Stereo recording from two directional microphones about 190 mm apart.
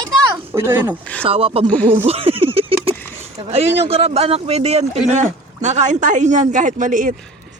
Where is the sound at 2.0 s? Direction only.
30° right (ahead or behind).